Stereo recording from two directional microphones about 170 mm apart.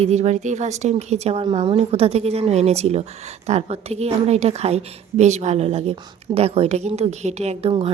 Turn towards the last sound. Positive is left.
turn(degrees=-35)  # may be behind; listen again after turning